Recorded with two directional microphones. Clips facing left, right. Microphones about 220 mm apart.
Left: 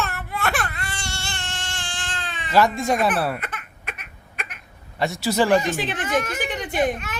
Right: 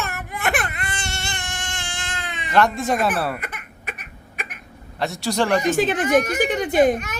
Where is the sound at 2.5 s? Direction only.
Centre (ahead or behind).